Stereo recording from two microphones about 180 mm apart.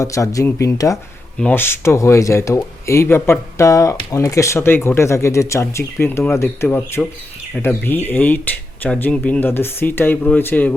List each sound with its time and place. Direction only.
0.0 s speech: 15° left (ahead or behind)